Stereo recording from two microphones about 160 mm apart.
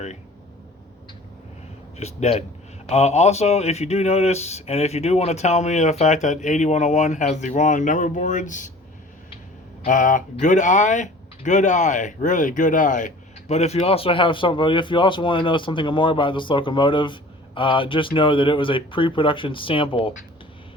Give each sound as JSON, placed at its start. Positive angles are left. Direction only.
{"t": 2.0, "sound": "speech", "side_deg": 40}
{"t": 9.8, "sound": "speech", "side_deg": 55}